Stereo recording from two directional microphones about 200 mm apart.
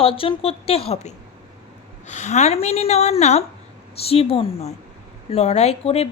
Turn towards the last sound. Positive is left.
turn(degrees=30)  # may be behind; listen again after turning